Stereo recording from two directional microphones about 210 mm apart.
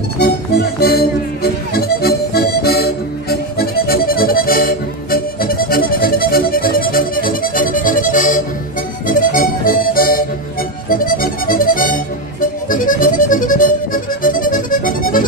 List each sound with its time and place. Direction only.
0.7 s music: 50° left (ahead or behind)